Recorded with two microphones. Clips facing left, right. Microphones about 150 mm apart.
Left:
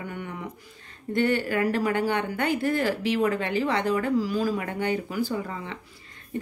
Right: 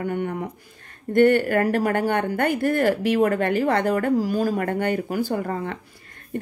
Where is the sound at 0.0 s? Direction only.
50° right (ahead or behind).